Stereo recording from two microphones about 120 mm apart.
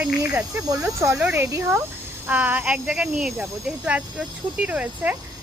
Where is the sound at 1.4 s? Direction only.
20° right (ahead or behind).